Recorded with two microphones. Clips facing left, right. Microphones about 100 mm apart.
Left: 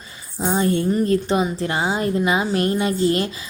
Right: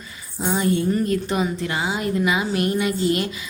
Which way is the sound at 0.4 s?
35° left (ahead or behind).